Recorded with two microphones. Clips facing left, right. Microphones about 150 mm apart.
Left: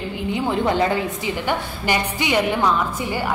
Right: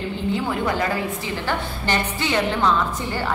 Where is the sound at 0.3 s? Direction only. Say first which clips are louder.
Left 3 dB; 20° left (ahead or behind).